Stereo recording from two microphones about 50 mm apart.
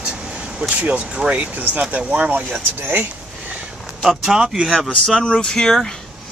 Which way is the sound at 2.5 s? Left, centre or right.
Right.